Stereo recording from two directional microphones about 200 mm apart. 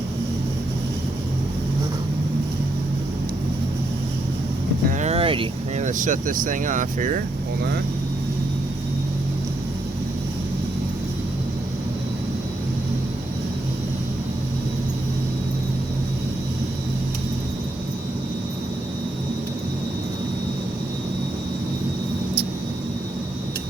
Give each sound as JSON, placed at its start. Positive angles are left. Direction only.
{"t": 4.9, "sound": "speech", "side_deg": -35}